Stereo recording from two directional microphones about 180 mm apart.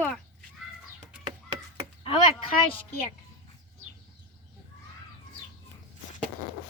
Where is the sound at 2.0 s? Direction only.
30° left (ahead or behind).